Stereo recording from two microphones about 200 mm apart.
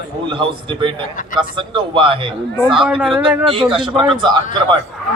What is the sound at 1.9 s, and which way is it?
Speech, 25° right (ahead or behind).